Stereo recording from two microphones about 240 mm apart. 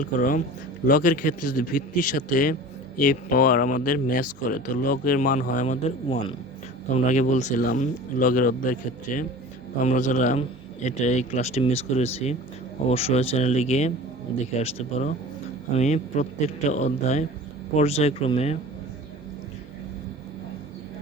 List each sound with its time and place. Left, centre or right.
0.0 s speech: left
15.8 s speech: left